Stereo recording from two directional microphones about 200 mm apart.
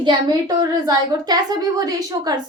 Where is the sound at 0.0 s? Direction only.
20° right (ahead or behind).